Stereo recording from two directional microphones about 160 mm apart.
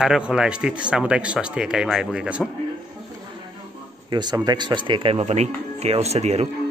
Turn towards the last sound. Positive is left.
turn(degrees=-40)  # may be behind; listen again after turning